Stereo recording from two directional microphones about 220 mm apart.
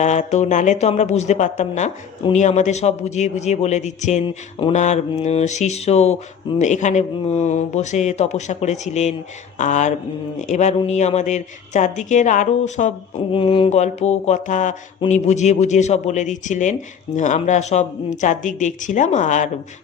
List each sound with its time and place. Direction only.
0.0 s speech: 30° left (ahead or behind)